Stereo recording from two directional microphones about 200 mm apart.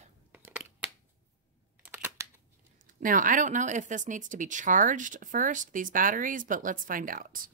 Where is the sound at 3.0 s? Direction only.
40° right (ahead or behind).